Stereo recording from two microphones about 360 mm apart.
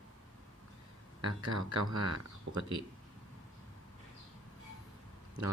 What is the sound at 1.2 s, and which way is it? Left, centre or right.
Speech, right.